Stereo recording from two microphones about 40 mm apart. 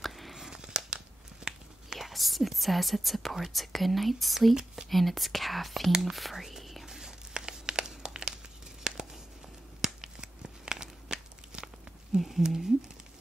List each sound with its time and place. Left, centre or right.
0.0 s a sound: centre
0.5 s a sound: centre
1.4 s biting: centre
2.0 s whispering: centre
3.5 s speech: centre
6.9 s crumpling: centre
8.8 s a sound: centre
9.8 s tearing: centre
12.2 s speech: centre